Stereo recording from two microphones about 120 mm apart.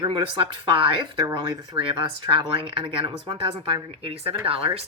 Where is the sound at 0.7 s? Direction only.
45° right (ahead or behind).